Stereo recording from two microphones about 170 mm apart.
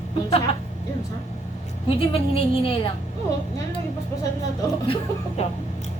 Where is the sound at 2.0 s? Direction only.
35° left (ahead or behind).